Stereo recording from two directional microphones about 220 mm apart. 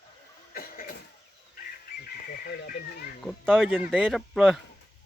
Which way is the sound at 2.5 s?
45° left (ahead or behind).